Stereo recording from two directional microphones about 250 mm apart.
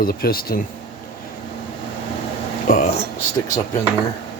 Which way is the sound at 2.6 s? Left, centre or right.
Left.